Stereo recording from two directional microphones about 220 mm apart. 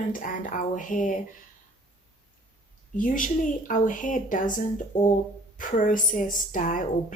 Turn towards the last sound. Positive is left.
turn(degrees=35)  # may be behind; listen again after turning